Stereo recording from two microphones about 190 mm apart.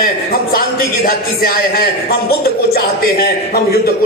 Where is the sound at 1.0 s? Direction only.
50° left (ahead or behind).